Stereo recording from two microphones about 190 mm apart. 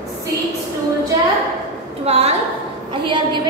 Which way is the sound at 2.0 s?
35° right (ahead or behind).